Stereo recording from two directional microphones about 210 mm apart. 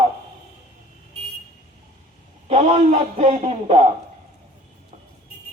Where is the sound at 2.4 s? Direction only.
30° right (ahead or behind).